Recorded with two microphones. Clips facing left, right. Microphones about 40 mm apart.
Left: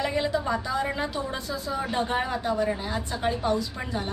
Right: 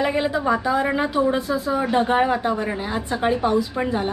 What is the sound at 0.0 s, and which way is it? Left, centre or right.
A woman's voice, centre.